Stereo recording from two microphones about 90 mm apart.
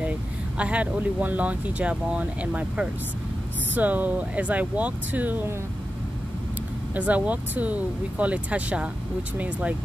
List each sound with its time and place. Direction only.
0.6 s speech: 15° right (ahead or behind)
7.0 s speech: 15° right (ahead or behind)